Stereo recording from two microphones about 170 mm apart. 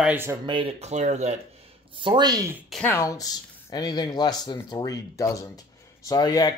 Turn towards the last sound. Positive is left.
turn(degrees=25)  # may be behind; listen again after turning